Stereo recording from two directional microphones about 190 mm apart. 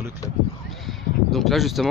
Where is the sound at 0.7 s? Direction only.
Centre (ahead or behind).